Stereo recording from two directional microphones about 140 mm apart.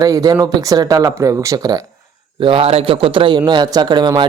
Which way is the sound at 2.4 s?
40° right (ahead or behind).